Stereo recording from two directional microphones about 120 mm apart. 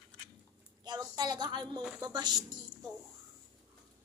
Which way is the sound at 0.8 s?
35° right (ahead or behind).